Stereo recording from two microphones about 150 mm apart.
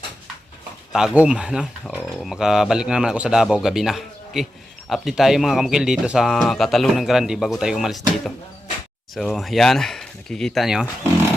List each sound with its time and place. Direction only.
0.9 s speech: 5° right (ahead or behind)